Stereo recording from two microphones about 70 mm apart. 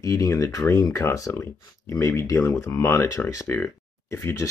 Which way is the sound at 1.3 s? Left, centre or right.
Left.